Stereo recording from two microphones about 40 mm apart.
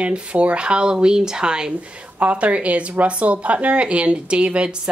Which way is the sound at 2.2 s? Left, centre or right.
Right.